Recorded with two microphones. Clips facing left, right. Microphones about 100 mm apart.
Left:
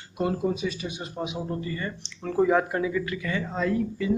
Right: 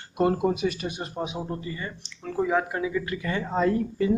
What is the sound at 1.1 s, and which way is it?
Speech, 30° right (ahead or behind).